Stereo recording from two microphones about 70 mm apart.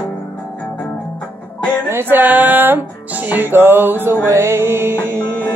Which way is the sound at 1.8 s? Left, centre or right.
Right.